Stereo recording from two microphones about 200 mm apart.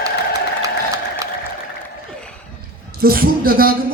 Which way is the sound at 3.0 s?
50° right (ahead or behind).